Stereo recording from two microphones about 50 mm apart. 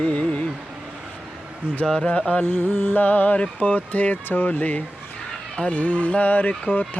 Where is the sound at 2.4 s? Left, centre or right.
Left.